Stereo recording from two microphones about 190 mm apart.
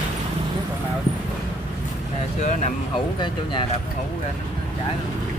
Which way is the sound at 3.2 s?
25° left (ahead or behind).